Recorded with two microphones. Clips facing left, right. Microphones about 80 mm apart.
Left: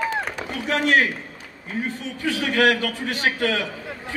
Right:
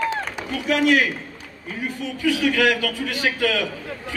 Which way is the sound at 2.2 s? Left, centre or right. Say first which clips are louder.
Right 1 dB; left.